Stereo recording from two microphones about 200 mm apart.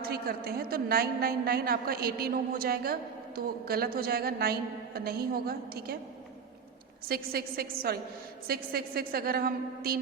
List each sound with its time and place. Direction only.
0.0 s a woman's voice: 50° right (ahead or behind)
7.1 s a woman's voice: 50° right (ahead or behind)